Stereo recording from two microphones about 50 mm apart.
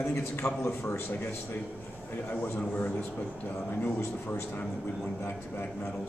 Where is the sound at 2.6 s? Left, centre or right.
Left.